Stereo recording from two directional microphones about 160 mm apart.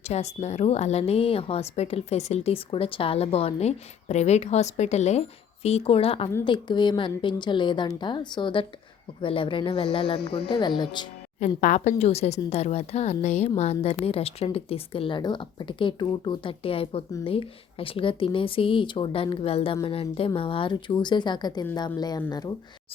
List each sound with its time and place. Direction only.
0.1 s a woman's voice: 45° left (ahead or behind); by 11.0 s 30° left (ahead or behind)
11.3 s a woman's voice: 50° left (ahead or behind); by 22.5 s 25° left (ahead or behind)